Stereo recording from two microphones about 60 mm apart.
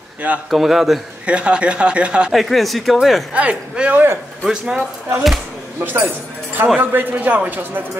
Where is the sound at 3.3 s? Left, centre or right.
Centre.